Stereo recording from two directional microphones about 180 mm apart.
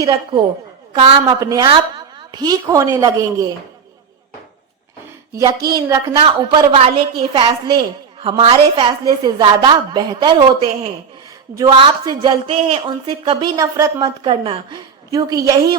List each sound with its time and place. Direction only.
0.0 s a woman's voice: 25° right (ahead or behind)
5.6 s a woman's voice: 25° right (ahead or behind)
11.5 s a woman's voice: 20° right (ahead or behind)